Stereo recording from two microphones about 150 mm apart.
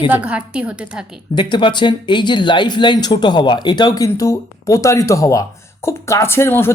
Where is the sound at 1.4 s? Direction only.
30° left (ahead or behind).